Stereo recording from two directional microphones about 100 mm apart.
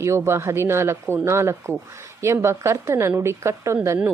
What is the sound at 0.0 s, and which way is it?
A woman's voice, 30° right (ahead or behind).